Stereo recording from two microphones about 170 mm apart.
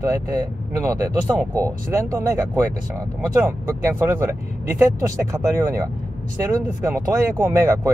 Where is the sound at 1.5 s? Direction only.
20° right (ahead or behind).